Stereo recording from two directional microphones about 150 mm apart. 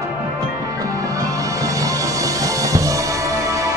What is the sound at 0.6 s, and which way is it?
Music, 20° right (ahead or behind).